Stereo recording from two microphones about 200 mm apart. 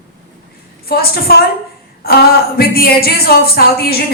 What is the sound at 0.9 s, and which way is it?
A woman's voice, 50° left (ahead or behind).